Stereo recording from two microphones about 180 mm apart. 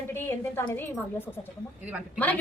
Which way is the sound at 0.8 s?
10° left (ahead or behind).